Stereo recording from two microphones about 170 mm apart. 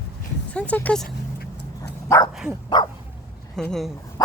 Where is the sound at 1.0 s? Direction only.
65° left (ahead or behind).